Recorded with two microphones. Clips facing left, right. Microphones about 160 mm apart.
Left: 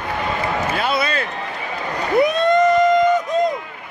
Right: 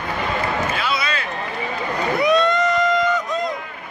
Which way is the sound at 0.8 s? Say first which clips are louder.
Left 3 dB; 50° left (ahead or behind).